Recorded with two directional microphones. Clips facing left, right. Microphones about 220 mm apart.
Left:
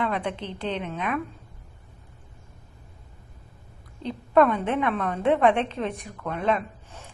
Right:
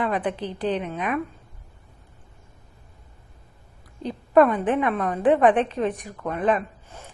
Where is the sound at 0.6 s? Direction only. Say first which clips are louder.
Right 4 dB; 5° right (ahead or behind).